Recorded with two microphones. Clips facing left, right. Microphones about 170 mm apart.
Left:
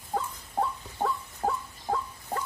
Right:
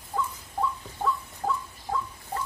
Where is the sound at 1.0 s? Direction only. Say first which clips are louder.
Even; 55° left (ahead or behind).